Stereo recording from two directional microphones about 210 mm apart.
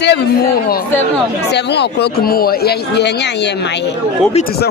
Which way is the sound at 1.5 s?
55° left (ahead or behind).